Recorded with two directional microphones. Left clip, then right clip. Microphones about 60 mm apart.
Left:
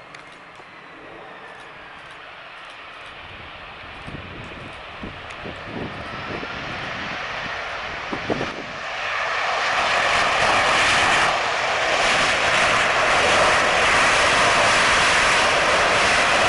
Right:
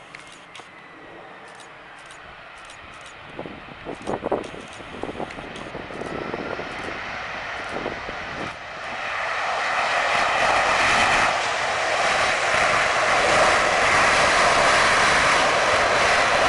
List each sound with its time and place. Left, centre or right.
6.2 s vehicle: centre